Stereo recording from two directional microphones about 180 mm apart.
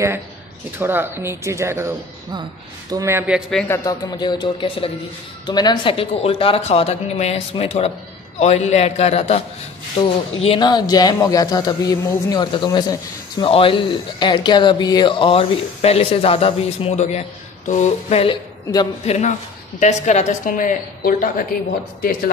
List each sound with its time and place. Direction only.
0.7 s speech: 10° right (ahead or behind)
3.6 s speech: 15° left (ahead or behind)
19.0 s a woman's voice: 40° left (ahead or behind)